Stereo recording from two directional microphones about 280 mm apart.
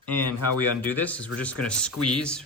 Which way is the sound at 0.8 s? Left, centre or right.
Centre.